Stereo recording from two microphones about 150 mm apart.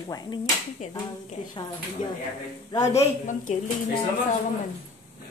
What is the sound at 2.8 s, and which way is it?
Speech, 55° left (ahead or behind).